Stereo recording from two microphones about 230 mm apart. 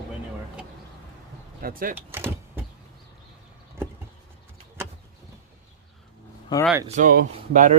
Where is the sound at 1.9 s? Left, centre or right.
Centre.